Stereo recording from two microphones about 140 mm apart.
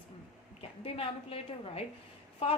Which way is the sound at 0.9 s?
40° left (ahead or behind).